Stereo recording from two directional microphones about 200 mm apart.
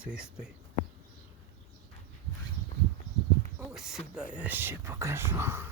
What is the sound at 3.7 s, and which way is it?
Speech, centre (ahead or behind).